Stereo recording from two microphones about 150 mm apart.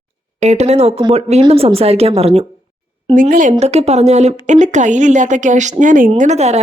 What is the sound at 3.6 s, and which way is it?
Speech, 45° right (ahead or behind).